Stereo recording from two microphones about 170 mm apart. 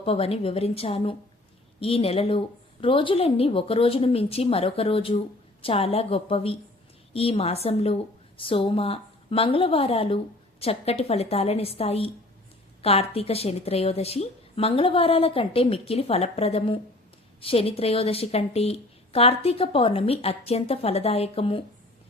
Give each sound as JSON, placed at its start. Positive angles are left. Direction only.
{"t": 0.0, "sound": "a woman's voice", "side_deg": 35}